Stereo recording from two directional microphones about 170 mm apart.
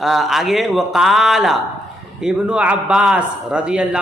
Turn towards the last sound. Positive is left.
turn(degrees=-5)  # may be behind; listen again after turning